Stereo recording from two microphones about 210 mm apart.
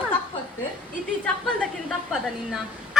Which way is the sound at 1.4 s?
Centre (ahead or behind).